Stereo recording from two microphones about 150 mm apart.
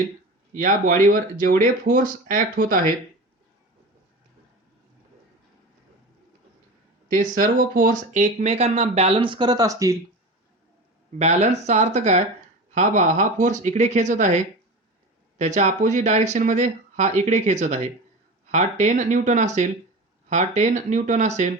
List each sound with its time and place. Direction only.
0.5 s speech: 60° right (ahead or behind)
7.1 s speech: 60° right (ahead or behind); by 10.0 s 20° right (ahead or behind)
11.2 s speech: 45° right (ahead or behind)
15.4 s speech: 50° right (ahead or behind)